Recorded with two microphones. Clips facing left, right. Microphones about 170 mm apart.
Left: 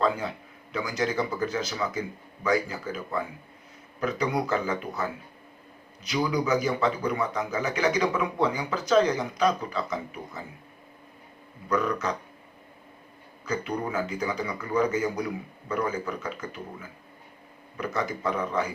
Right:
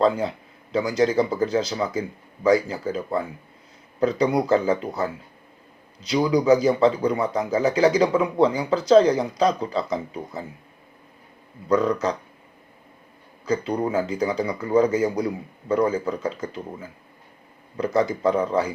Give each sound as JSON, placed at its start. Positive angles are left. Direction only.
{"t": 0.0, "sound": "speech", "side_deg": -35}
{"t": 11.7, "sound": "speech", "side_deg": -30}
{"t": 13.4, "sound": "speech", "side_deg": -30}
{"t": 17.7, "sound": "speech", "side_deg": -30}